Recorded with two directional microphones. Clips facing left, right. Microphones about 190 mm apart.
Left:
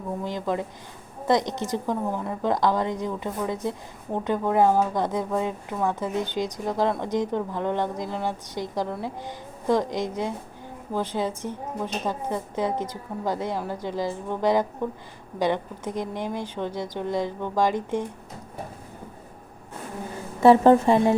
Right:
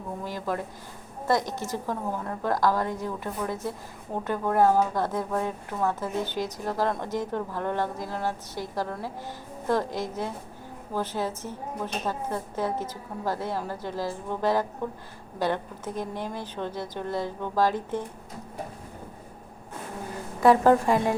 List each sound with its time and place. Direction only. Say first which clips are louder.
0.3 s a woman's voice: left 2 dB; 20° left (ahead or behind)
20.4 s a woman's voice: left 4 dB; 25° left (ahead or behind)